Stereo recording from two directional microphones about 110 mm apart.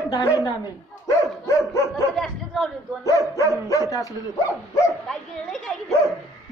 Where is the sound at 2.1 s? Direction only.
Centre (ahead or behind).